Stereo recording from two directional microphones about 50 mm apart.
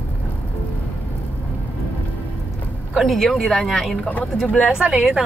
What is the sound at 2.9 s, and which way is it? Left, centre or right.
Speech, centre.